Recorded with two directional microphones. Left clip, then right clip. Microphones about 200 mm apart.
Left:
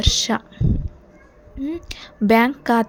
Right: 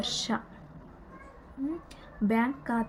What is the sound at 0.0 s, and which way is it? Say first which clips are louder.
Speech: left 11 dB; 40° left (ahead or behind).